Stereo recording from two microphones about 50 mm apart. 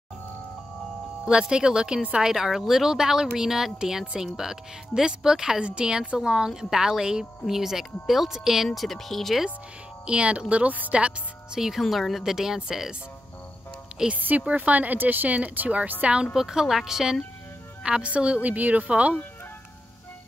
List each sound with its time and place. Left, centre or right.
1.2 s a woman's voice: centre
8.7 s speech: centre
10.0 s speech: right
11.6 s a woman's voice: centre
14.1 s speech: right
16.3 s a woman's voice: centre; by 19.1 s right